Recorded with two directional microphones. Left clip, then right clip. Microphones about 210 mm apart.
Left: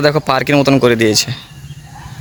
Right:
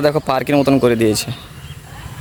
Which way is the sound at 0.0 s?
5° right (ahead or behind).